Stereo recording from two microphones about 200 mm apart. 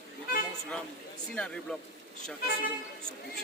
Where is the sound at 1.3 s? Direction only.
5° left (ahead or behind).